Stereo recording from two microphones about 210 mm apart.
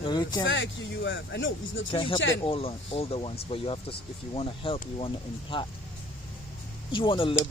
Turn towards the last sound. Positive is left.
turn(degrees=25)  # may be behind; listen again after turning